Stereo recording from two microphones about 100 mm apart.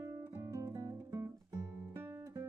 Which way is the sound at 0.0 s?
30° right (ahead or behind).